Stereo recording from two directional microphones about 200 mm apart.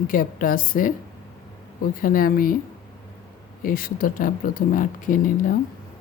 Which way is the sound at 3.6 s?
45° left (ahead or behind).